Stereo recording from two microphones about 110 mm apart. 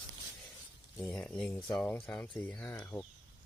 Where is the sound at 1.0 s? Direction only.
10° left (ahead or behind).